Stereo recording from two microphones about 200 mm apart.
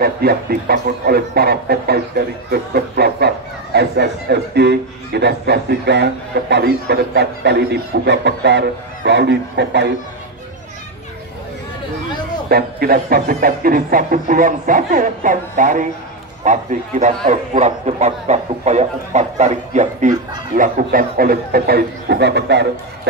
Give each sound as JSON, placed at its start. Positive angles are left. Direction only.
{"t": 0.0, "sound": "speech", "side_deg": -50}
{"t": 12.4, "sound": "a man's voice", "side_deg": -50}